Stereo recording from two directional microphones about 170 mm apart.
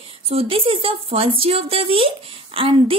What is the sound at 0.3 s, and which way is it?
A woman's voice, 35° right (ahead or behind).